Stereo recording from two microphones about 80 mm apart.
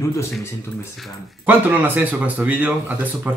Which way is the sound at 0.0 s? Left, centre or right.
Left.